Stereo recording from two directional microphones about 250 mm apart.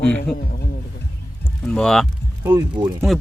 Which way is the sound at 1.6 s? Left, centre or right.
Centre.